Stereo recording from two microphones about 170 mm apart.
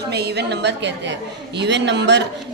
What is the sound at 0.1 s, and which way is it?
A woman's voice, 75° right (ahead or behind).